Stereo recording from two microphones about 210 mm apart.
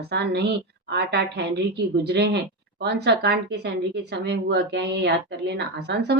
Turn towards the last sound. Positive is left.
turn(degrees=-55)  # may be behind; listen again after turning